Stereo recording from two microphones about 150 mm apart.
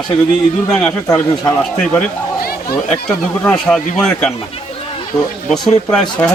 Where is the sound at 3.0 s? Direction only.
5° left (ahead or behind).